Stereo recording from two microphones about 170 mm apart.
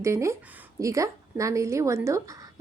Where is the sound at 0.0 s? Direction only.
15° right (ahead or behind).